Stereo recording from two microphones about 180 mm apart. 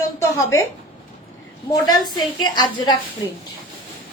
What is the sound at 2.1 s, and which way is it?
A woman's voice, 25° left (ahead or behind).